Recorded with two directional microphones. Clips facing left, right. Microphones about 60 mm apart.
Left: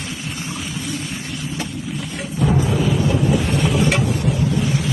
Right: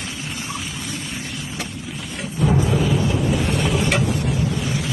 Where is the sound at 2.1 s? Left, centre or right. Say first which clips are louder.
Even; centre.